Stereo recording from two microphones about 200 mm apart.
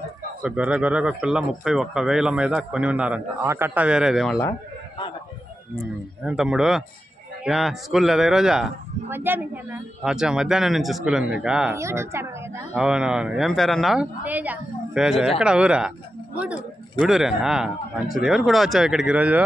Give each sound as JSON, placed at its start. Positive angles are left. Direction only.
{"t": 0.4, "sound": "speech", "side_deg": -5}
{"t": 4.4, "sound": "a sound", "side_deg": 20}
{"t": 6.2, "sound": "a woman's voice", "side_deg": -5}
{"t": 17.0, "sound": "speech", "side_deg": 0}